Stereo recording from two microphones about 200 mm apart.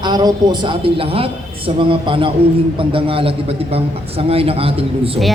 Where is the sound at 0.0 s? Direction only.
20° right (ahead or behind).